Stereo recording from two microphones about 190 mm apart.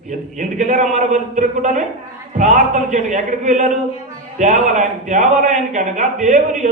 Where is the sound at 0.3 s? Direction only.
40° right (ahead or behind).